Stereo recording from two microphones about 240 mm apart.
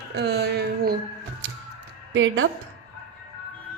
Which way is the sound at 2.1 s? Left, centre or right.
Right.